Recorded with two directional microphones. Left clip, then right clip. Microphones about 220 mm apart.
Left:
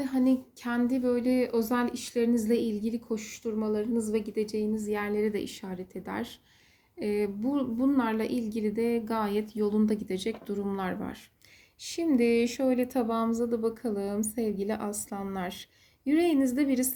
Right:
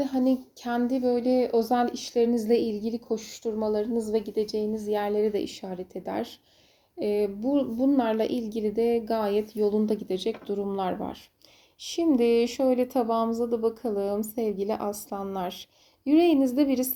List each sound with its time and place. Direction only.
0.2 s a woman's voice: 15° left (ahead or behind)